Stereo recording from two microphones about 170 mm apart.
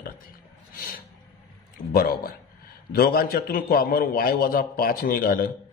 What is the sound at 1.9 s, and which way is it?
A man's voice, 65° left (ahead or behind).